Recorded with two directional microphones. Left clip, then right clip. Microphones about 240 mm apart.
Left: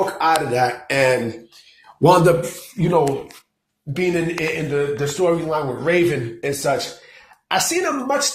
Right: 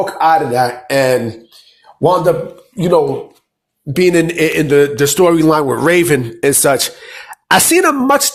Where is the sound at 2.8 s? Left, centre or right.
Right.